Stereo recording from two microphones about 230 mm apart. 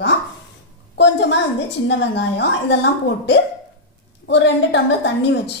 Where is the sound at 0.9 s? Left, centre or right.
Left.